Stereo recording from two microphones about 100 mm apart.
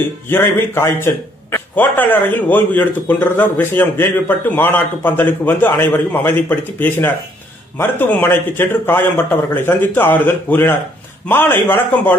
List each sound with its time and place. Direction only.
0.0 s a man's voice: 20° left (ahead or behind)